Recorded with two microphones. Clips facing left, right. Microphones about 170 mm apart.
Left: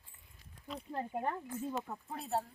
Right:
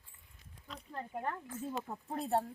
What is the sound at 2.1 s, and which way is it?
Speech, 45° right (ahead or behind).